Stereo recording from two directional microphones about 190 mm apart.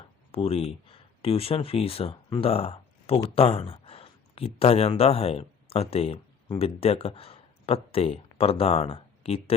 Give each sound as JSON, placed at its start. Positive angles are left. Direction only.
{"t": 0.3, "sound": "speech", "side_deg": 30}